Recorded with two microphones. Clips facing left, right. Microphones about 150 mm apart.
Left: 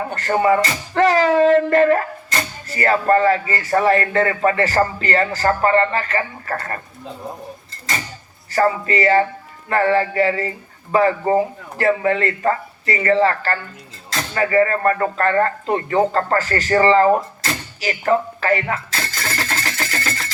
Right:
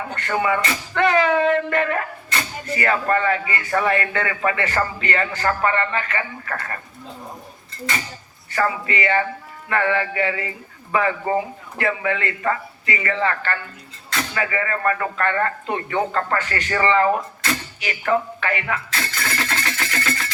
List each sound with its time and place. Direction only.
0.2 s music: 35° left (ahead or behind)
8.5 s music: 35° left (ahead or behind)
14.1 s speech: 35° left (ahead or behind)